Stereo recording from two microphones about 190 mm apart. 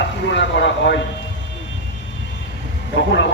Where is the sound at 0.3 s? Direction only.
70° left (ahead or behind).